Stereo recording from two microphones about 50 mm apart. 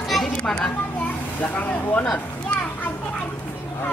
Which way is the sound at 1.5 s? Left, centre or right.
Left.